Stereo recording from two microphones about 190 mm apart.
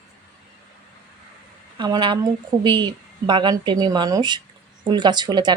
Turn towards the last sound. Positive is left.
turn(degrees=-20)  # may be behind; listen again after turning